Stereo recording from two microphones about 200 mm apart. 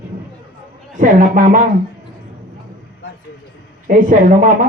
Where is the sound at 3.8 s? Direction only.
40° right (ahead or behind).